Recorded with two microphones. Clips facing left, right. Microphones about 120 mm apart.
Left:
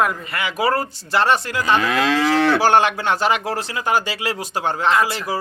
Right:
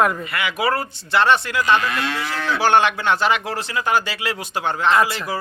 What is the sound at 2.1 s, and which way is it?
Speech, 90° left.